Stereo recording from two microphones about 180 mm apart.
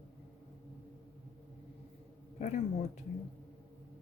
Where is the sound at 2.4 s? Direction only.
40° left (ahead or behind).